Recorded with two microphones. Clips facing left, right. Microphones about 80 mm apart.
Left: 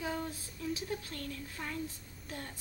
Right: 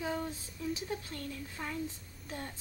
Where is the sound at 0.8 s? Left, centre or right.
Centre.